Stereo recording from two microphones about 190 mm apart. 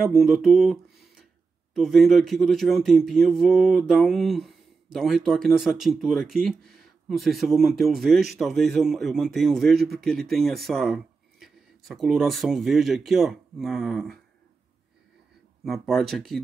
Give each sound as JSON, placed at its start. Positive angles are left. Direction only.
{"t": 0.0, "sound": "speech", "side_deg": 0}
{"t": 15.6, "sound": "speech", "side_deg": 0}